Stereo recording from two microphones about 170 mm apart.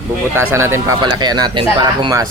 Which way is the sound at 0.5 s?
15° right (ahead or behind).